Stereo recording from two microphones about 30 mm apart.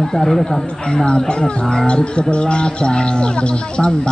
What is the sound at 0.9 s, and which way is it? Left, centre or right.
Speech, left.